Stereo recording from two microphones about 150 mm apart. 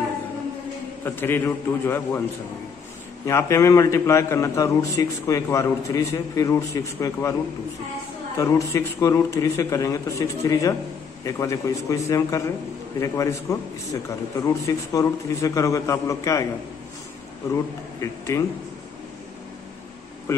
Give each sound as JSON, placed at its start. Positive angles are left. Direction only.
{"t": 1.0, "sound": "a man's voice", "side_deg": 15}
{"t": 3.3, "sound": "a man's voice", "side_deg": 20}
{"t": 8.4, "sound": "a man's voice", "side_deg": 20}
{"t": 18.0, "sound": "a man's voice", "side_deg": 20}
{"t": 20.3, "sound": "speech", "side_deg": 20}